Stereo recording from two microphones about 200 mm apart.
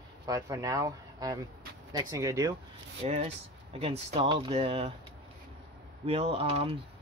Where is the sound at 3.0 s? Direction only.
35° right (ahead or behind).